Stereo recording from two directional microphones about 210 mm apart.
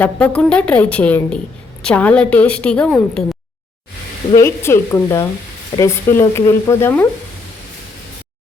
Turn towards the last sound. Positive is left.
turn(degrees=10)  # may be behind; listen again after turning